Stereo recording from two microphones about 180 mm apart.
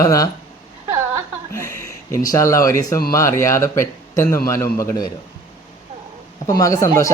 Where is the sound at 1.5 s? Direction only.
15° left (ahead or behind).